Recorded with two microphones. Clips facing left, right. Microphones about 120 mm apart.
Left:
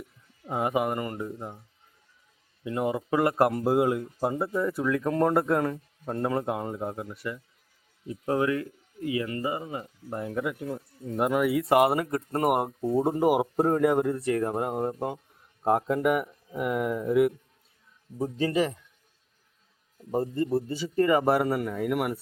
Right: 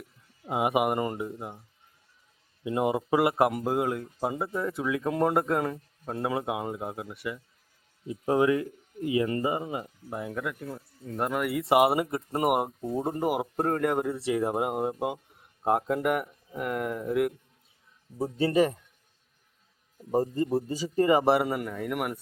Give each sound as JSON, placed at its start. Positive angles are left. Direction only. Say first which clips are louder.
{"t": 0.4, "sound": "speech", "louder": "right 1 dB", "side_deg": -15}
{"t": 1.3, "sound": "speech", "louder": "left 1 dB", "side_deg": -5}
{"t": 2.6, "sound": "speech", "louder": "right 2 dB", "side_deg": -20}
{"t": 8.0, "sound": "speech", "louder": "right 2 dB", "side_deg": -20}
{"t": 10.1, "sound": "speech", "louder": "left 3 dB", "side_deg": 0}
{"t": 12.9, "sound": "speech", "louder": "left 6 dB", "side_deg": 5}
{"t": 14.3, "sound": "speech", "louder": "even", "side_deg": -10}
{"t": 18.3, "sound": "speech", "louder": "right 3 dB", "side_deg": -40}
{"t": 20.0, "sound": "speech", "louder": "right 1 dB", "side_deg": -15}
{"t": 21.2, "sound": "speech", "louder": "even", "side_deg": 0}